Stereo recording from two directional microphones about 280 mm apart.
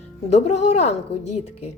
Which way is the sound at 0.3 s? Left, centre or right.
Left.